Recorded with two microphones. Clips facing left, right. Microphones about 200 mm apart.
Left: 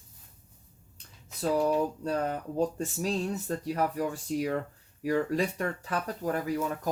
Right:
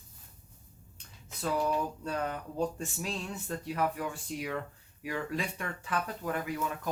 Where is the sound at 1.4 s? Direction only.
40° left (ahead or behind).